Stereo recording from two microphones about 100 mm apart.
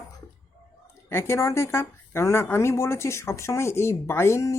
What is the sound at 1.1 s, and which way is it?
A woman's voice, 30° left (ahead or behind).